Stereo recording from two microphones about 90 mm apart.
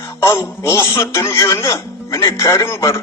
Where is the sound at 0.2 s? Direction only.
30° left (ahead or behind).